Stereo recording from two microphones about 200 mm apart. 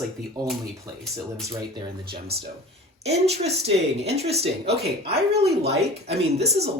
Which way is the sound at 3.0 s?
30° right (ahead or behind).